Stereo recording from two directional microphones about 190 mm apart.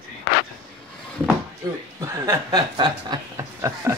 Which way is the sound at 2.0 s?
15° right (ahead or behind).